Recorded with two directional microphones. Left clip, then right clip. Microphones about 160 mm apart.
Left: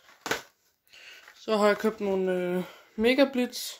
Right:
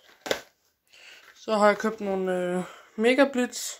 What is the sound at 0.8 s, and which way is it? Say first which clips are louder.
Speech: left 1 dB; 5° left (ahead or behind).